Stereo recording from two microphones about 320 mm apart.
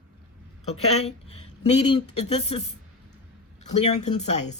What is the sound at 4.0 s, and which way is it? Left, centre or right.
Speech, left.